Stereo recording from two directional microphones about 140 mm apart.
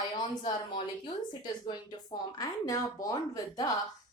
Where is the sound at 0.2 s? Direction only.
35° left (ahead or behind).